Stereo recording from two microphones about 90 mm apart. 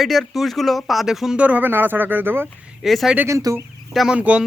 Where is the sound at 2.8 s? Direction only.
Centre (ahead or behind).